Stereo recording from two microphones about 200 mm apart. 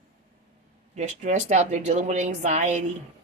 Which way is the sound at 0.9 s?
35° right (ahead or behind).